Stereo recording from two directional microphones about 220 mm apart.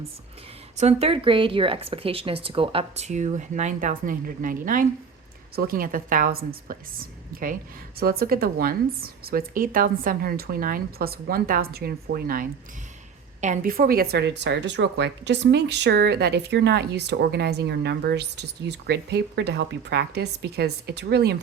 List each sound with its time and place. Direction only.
0.8 s a woman's voice: 30° right (ahead or behind); by 21.3 s 50° right (ahead or behind)